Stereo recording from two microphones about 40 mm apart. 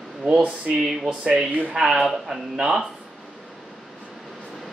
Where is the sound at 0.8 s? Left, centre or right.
Centre.